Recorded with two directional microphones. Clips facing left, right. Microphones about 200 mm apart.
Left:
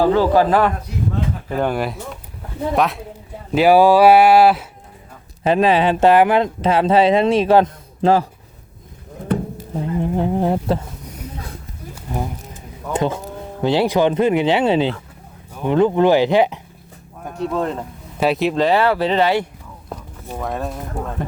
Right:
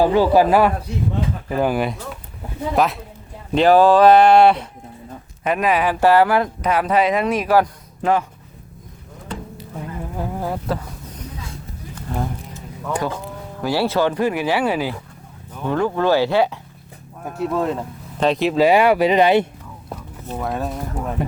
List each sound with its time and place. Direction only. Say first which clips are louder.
0.0 s speech: even; 15° right (ahead or behind); by 4.6 s 5° left (ahead or behind)
5.4 s speech: left 4 dB; 30° left (ahead or behind)
9.3 s a sound: left 11 dB; 60° left (ahead or behind)
9.7 s speech: left 9 dB; 25° left (ahead or behind)
11.9 s a sound: even; 10° left (ahead or behind)
12.8 s speech: left 3 dB; 20° left (ahead or behind)
17.2 s speech: right 1 dB; 5° right (ahead or behind)
18.6 s speech: right 4 dB; 15° right (ahead or behind)
20.3 s speech: even; centre (ahead or behind)
21.2 s speech: right 3 dB; 10° right (ahead or behind)